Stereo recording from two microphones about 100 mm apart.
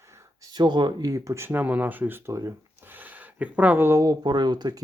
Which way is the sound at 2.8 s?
20° right (ahead or behind).